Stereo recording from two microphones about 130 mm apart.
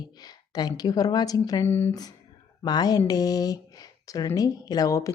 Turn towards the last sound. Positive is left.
turn(degrees=25)  # may be behind; listen again after turning